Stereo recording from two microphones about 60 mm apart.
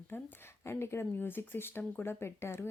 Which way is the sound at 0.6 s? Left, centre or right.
Left.